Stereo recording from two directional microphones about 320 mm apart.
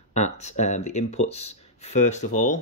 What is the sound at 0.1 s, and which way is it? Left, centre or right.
Speech, left.